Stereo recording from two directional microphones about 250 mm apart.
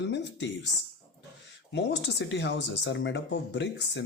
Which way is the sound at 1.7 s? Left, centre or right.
Left.